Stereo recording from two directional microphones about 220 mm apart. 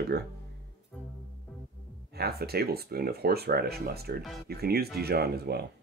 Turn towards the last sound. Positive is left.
turn(degrees=-45)  # may be behind; listen again after turning